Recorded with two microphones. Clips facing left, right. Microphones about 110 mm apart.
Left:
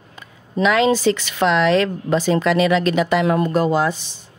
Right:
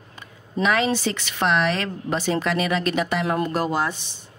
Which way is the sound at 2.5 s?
90° left.